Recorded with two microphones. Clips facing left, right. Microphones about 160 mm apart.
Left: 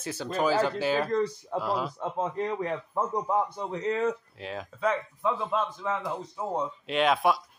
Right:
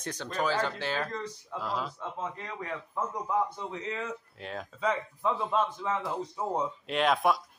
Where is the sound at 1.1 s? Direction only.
45° left (ahead or behind).